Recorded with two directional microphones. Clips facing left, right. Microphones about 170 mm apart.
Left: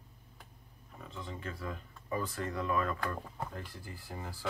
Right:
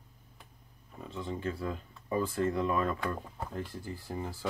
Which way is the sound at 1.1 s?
25° right (ahead or behind).